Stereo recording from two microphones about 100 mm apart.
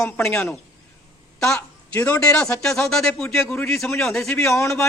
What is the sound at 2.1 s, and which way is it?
Speech, 10° left (ahead or behind).